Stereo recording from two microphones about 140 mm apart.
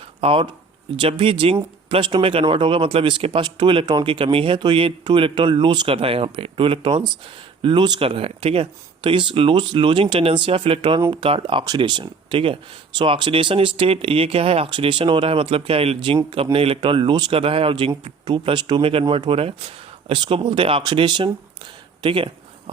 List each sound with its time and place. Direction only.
0.2 s speech: 40° right (ahead or behind)
17.3 s speech: 40° right (ahead or behind)
22.0 s a sound: 40° right (ahead or behind)